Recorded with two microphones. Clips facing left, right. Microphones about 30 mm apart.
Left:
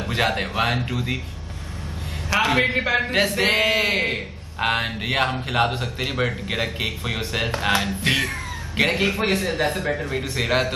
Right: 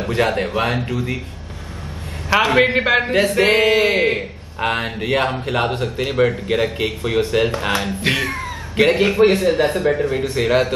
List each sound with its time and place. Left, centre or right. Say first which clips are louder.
0.3 s a man's voice: right 3 dB; centre
2.2 s a man's voice: right 5 dB; centre
3.3 s a man's voice: right 6 dB; centre
4.6 s a man's voice: right 2 dB; centre